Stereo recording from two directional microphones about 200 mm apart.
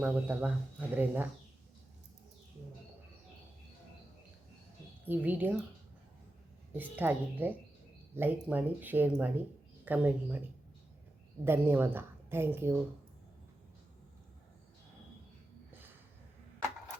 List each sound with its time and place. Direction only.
0.0 s a woman's voice: 5° right (ahead or behind)
5.0 s a woman's voice: 10° right (ahead or behind)
6.7 s a woman's voice: 10° right (ahead or behind)
11.4 s a woman's voice: 10° right (ahead or behind)